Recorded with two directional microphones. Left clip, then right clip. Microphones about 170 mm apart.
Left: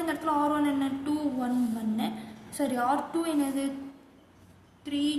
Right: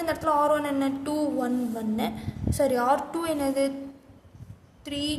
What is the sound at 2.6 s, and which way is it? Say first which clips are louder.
A woman's voice: right 5 dB; 90° right.